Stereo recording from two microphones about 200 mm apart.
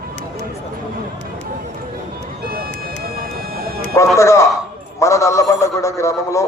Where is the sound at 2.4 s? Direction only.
50° right (ahead or behind).